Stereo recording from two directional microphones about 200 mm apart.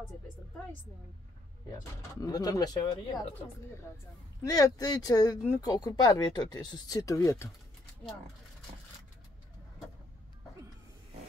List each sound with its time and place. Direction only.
2.0 s speech: 20° left (ahead or behind)
4.5 s speech: 15° left (ahead or behind)